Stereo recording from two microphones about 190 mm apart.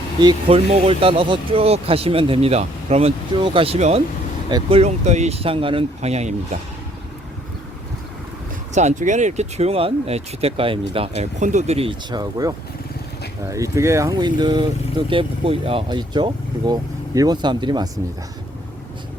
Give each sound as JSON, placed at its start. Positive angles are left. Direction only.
{"t": 0.2, "sound": "speech", "side_deg": -25}
{"t": 8.7, "sound": "speech", "side_deg": -35}